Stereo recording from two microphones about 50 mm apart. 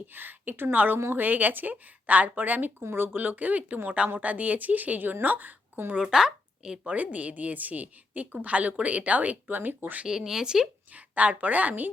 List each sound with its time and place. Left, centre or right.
0.1 s a woman's voice: right
6.0 s a woman's voice: centre
6.8 s speech: right
10.1 s speech: centre
10.9 s speech: right